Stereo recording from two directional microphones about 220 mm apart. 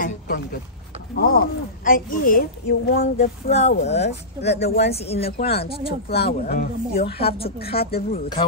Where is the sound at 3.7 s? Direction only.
50° left (ahead or behind).